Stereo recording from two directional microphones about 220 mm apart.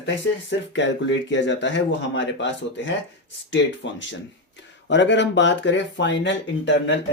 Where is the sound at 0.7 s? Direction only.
55° left (ahead or behind).